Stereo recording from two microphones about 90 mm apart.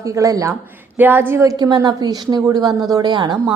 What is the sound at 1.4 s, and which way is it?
A woman's voice, 40° right (ahead or behind).